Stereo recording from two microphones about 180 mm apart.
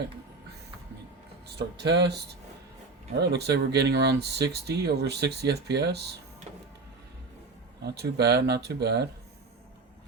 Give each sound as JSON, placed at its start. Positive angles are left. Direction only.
{"t": 1.5, "sound": "speech", "side_deg": -70}
{"t": 3.2, "sound": "speech", "side_deg": -65}
{"t": 7.9, "sound": "speech", "side_deg": -65}